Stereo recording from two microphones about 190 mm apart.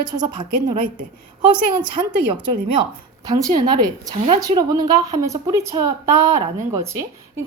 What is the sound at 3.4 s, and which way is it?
A woman's voice, 20° right (ahead or behind).